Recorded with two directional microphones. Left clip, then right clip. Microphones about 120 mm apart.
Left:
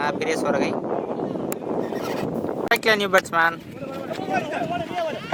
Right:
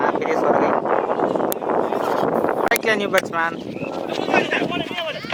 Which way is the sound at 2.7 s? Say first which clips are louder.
Even; 15° left (ahead or behind).